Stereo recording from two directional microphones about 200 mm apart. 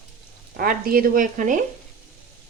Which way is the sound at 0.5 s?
45° right (ahead or behind).